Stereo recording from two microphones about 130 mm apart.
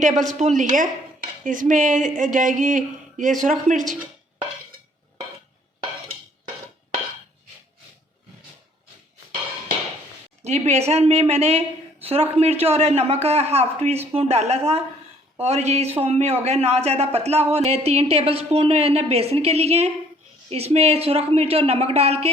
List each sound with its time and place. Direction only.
0.0 s dishes: 70° right (ahead or behind)
10.4 s speech: 55° right (ahead or behind)